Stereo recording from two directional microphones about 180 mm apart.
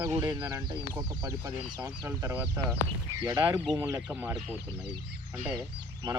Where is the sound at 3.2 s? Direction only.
25° right (ahead or behind).